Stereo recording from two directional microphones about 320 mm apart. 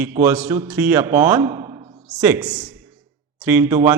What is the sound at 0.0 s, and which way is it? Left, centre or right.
Speech, centre.